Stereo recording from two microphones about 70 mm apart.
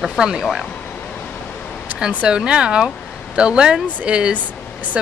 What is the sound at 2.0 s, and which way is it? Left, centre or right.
Speech, centre.